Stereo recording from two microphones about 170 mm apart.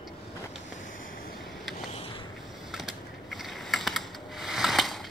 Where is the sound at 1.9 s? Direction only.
35° left (ahead or behind).